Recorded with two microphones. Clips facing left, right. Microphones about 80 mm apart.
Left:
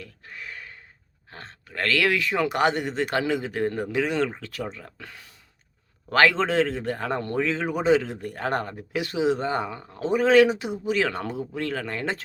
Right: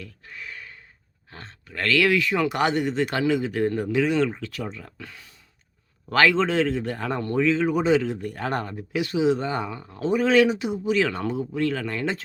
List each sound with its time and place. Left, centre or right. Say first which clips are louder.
0.0 s gasp: even; left
1.3 s speech: even; left